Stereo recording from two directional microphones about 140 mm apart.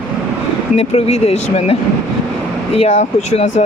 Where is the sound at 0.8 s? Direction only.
50° left (ahead or behind).